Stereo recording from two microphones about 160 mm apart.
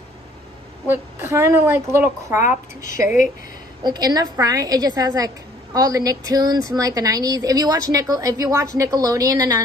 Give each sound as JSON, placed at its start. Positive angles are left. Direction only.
{"t": 0.8, "sound": "a woman's voice", "side_deg": -15}
{"t": 3.8, "sound": "a woman's voice", "side_deg": -25}